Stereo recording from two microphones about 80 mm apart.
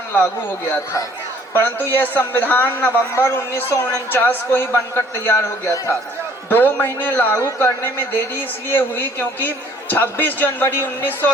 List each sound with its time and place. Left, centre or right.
1.5 s a man's voice: left
3.2 s a man's voice: left
5.7 s a man's voice: left
6.5 s a man's voice: left